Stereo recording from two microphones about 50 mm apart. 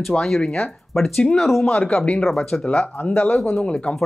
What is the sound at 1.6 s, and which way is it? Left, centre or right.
Speech, left.